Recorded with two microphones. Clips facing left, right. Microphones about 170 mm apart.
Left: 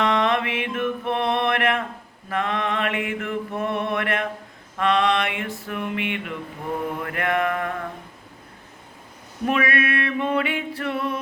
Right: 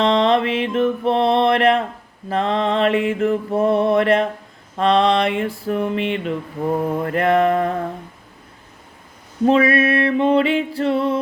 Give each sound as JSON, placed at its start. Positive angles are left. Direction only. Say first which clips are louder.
{"t": 0.0, "sound": "mantra", "louder": "right 5 dB", "side_deg": -25}
{"t": 9.5, "sound": "mantra", "louder": "right 7 dB", "side_deg": -30}